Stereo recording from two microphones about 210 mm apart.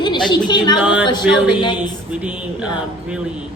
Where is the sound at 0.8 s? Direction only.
5° right (ahead or behind).